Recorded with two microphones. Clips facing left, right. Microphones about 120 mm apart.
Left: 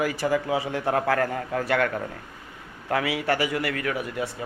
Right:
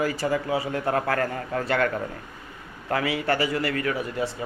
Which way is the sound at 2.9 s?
5° left (ahead or behind).